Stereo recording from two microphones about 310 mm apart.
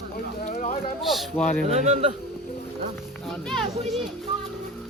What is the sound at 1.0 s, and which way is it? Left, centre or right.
Speech, centre.